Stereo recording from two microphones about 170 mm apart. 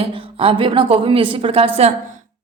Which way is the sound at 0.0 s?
35° right (ahead or behind).